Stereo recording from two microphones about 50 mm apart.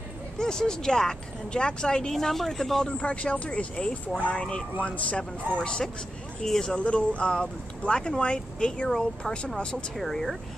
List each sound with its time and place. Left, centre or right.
0.4 s speech: centre
2.1 s speech: centre
3.0 s speech: left; by 6.7 s centre
6.7 s speech: left
9.9 s speech: centre